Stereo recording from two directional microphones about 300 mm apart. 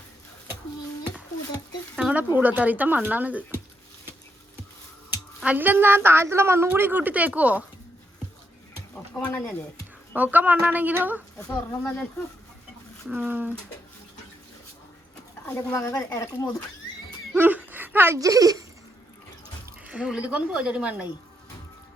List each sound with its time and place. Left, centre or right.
2.0 s a woman's voice: centre
5.4 s a woman's voice: centre
9.5 s music: centre
10.2 s a woman's voice: centre
13.1 s a woman's voice: centre
15.4 s speech: centre
17.3 s speech: centre
19.8 s a woman's voice: centre